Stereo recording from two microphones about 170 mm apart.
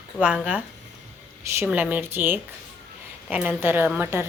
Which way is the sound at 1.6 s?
10° right (ahead or behind).